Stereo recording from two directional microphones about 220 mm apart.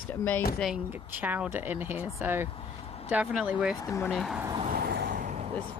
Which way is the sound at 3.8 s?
15° left (ahead or behind).